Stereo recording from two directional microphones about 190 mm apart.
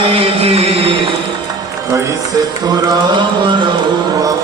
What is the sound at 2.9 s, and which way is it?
Mantra, 25° right (ahead or behind).